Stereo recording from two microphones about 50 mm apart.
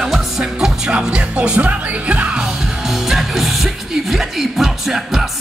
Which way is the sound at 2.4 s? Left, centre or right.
Centre.